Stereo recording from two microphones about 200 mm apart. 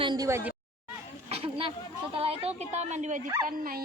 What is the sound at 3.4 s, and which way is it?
Speech, 45° right (ahead or behind).